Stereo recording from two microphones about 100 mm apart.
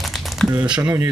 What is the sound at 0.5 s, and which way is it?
Speech, 10° right (ahead or behind).